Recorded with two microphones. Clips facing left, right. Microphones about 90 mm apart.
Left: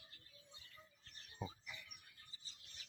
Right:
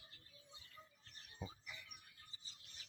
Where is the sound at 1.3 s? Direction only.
5° left (ahead or behind).